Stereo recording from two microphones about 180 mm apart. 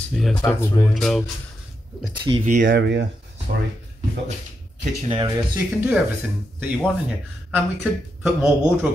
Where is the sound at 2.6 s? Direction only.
70° right (ahead or behind).